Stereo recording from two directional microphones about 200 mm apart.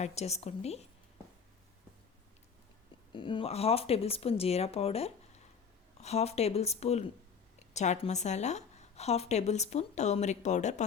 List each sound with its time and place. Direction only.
0.0 s a woman's voice: 30° left (ahead or behind)
3.1 s a woman's voice: 25° left (ahead or behind)